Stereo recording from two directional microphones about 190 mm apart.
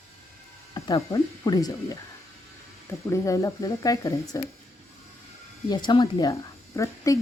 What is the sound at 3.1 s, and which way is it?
Speech, 15° left (ahead or behind).